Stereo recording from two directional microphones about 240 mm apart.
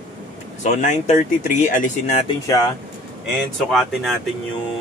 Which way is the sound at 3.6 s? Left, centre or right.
Centre.